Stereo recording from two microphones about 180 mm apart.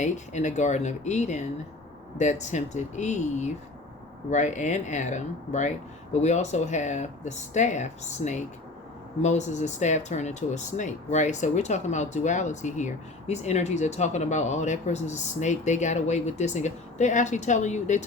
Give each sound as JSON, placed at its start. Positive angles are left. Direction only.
{"t": 0.0, "sound": "speech", "side_deg": 40}